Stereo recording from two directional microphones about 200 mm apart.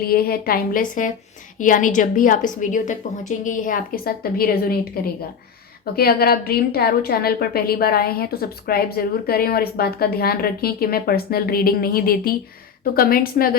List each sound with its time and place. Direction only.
0.0 s a woman's voice: 50° left (ahead or behind)
5.8 s a woman's voice: 50° left (ahead or behind)